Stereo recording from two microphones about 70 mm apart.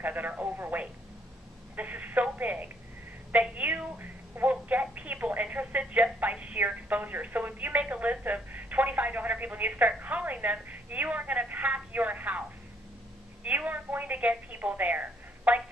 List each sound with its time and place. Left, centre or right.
0.0 s a woman's voice: right